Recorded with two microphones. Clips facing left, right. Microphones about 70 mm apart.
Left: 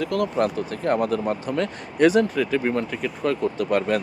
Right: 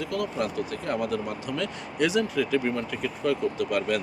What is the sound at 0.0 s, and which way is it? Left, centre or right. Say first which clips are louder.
Speech: left 6 dB; left.